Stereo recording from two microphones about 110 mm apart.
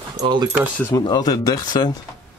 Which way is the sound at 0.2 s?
40° right (ahead or behind).